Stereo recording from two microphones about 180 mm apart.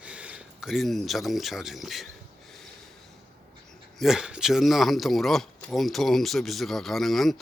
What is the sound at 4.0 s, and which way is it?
Speech, centre (ahead or behind).